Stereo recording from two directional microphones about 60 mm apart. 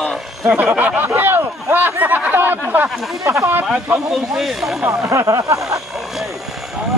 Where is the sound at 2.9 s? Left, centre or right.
Centre.